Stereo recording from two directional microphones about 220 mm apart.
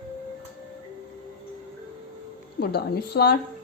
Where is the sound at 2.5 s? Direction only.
45° left (ahead or behind).